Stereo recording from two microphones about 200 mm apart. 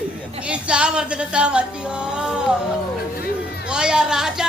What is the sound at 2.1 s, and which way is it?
Music, 5° right (ahead or behind).